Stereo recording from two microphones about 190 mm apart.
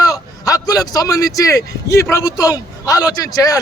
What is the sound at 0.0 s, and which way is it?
A man's voice, 20° left (ahead or behind).